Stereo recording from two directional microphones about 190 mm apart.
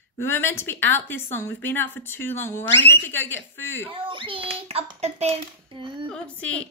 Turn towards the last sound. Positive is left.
turn(degrees=5)  # may be behind; listen again after turning